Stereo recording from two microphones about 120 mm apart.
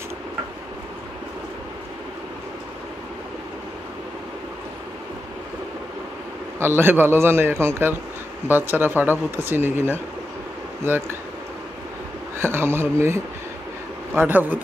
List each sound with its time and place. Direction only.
6.6 s a man's voice: 20° right (ahead or behind)
12.4 s a man's voice: 20° right (ahead or behind)